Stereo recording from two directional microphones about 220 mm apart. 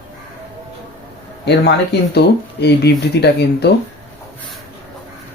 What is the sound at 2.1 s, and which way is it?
Speech, 50° left (ahead or behind).